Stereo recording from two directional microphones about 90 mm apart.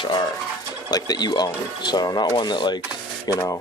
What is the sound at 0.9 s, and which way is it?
Speech, 45° left (ahead or behind).